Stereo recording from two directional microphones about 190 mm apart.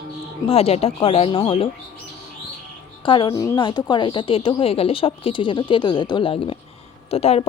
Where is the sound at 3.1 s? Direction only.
25° left (ahead or behind).